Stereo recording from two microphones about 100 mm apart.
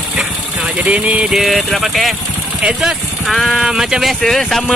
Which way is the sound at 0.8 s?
15° right (ahead or behind).